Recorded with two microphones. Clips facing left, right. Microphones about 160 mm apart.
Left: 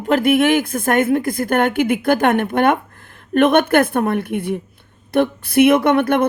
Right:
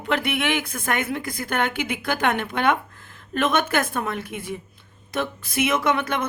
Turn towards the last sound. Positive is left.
turn(degrees=55)  # may be behind; listen again after turning